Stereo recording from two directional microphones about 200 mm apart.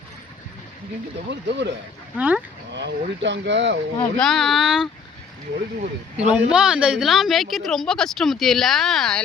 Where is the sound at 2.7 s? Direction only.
60° right (ahead or behind).